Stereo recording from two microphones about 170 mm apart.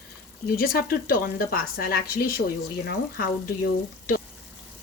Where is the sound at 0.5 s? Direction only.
60° left (ahead or behind).